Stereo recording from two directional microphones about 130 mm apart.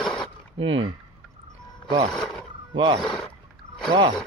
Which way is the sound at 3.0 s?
5° left (ahead or behind).